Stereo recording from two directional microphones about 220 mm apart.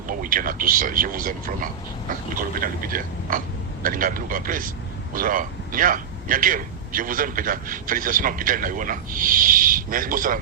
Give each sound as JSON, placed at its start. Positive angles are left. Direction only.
{"t": 0.1, "sound": "a man's voice", "side_deg": -40}